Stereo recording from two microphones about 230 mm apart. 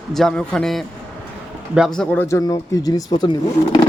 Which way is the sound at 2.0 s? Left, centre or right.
Centre.